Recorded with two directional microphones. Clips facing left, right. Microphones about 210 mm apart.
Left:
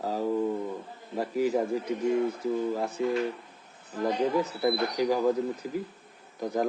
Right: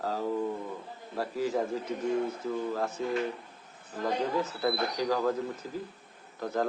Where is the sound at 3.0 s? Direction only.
15° left (ahead or behind).